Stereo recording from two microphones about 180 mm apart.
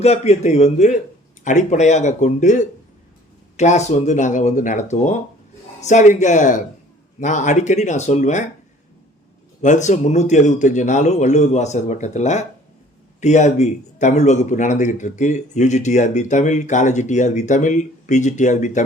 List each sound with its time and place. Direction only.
0.0 s a man's voice: 35° left (ahead or behind)
9.6 s a man's voice: 40° left (ahead or behind)